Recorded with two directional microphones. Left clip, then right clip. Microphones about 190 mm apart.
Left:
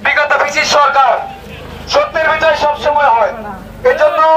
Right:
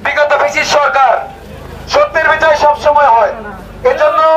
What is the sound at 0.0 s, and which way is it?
Music, 80° right.